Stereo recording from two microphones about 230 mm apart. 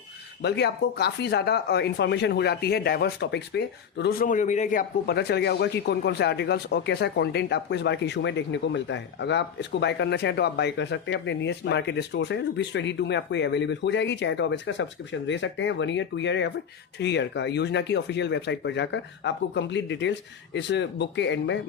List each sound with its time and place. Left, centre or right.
0.4 s speech: left